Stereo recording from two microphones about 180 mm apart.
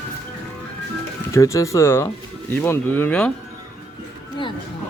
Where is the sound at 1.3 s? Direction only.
15° left (ahead or behind).